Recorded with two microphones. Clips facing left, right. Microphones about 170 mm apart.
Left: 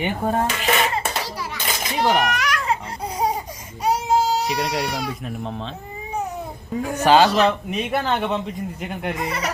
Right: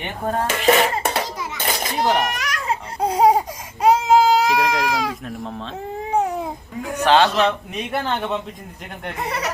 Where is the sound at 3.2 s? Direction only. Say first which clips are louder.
Right 8 dB; 90° right.